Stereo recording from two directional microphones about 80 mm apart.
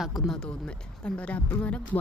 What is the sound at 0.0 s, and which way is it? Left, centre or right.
Speech, centre.